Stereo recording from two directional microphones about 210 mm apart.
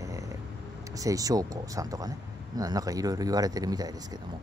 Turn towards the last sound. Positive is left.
turn(degrees=-20)  # may be behind; listen again after turning